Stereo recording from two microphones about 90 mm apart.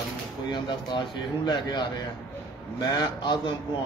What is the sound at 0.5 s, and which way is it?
Speech, 60° left (ahead or behind).